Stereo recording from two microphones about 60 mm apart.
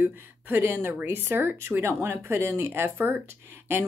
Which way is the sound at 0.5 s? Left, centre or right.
Right.